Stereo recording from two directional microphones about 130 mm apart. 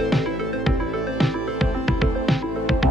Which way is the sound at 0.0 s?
Centre (ahead or behind).